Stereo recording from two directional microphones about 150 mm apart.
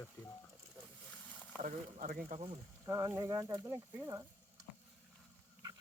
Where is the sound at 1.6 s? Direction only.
70° right (ahead or behind).